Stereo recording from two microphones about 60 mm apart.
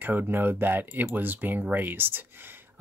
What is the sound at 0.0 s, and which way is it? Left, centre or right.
Speech, right.